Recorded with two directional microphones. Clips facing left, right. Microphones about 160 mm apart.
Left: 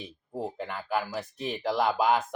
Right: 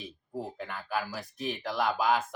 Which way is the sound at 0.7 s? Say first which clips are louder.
Left 3 dB; 20° left (ahead or behind).